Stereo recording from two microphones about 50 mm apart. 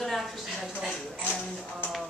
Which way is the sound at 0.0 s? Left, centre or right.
Centre.